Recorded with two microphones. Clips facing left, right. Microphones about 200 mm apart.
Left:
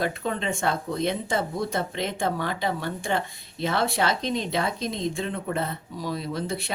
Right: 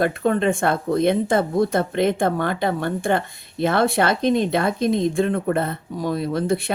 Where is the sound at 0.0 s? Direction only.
55° right (ahead or behind).